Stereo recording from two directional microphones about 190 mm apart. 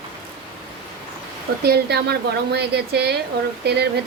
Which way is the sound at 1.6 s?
55° right (ahead or behind).